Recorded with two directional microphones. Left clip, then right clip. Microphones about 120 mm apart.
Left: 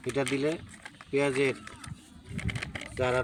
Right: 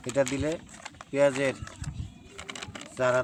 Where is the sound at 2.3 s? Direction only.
5° right (ahead or behind).